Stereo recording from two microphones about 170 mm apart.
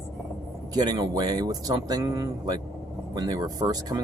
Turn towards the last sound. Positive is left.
turn(degrees=-20)  # may be behind; listen again after turning